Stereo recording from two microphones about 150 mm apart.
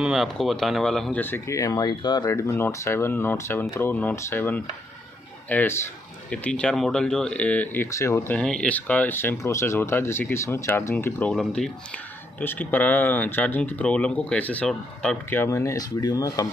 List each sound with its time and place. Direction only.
0.0 s speech: centre (ahead or behind); by 8.4 s 20° left (ahead or behind)
8.4 s speech: 5° left (ahead or behind)
11.3 s speech: 5° left (ahead or behind); by 16.4 s 25° left (ahead or behind)